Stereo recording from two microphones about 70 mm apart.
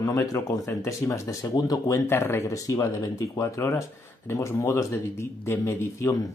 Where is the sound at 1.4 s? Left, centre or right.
Left.